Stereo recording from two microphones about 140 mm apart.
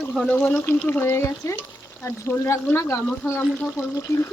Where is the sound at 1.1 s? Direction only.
20° left (ahead or behind); by 3.7 s 5° left (ahead or behind).